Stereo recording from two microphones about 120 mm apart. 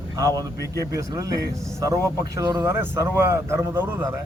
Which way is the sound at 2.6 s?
20° right (ahead or behind).